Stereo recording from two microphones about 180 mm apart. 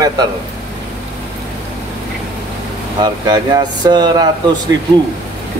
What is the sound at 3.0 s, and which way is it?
Speech, 25° right (ahead or behind).